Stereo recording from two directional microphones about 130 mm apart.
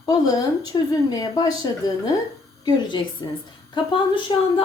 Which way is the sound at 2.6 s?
35° left (ahead or behind).